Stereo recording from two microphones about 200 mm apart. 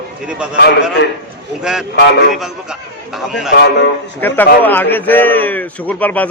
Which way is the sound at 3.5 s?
55° left (ahead or behind).